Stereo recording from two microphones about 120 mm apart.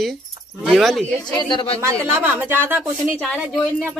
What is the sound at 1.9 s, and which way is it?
Speech, 20° right (ahead or behind).